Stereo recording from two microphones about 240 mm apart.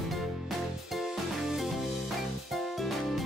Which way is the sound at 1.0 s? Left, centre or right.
Centre.